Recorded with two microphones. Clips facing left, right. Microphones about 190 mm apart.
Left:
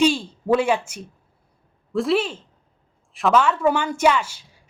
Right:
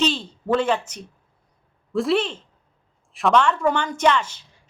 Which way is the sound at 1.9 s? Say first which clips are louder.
Even; centre (ahead or behind).